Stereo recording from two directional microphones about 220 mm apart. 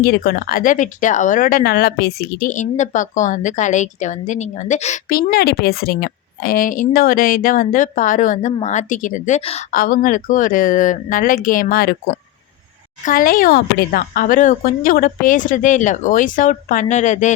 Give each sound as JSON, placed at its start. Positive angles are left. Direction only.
{"t": 0.0, "sound": "speech", "side_deg": 45}
{"t": 9.7, "sound": "speech", "side_deg": 40}
{"t": 13.1, "sound": "speech", "side_deg": 40}